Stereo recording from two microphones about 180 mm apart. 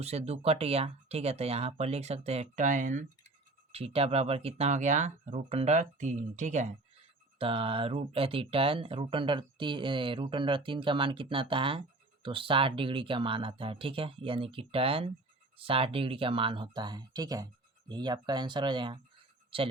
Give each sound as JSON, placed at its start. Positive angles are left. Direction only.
{"t": 0.0, "sound": "speech", "side_deg": -35}
{"t": 7.3, "sound": "speech", "side_deg": -30}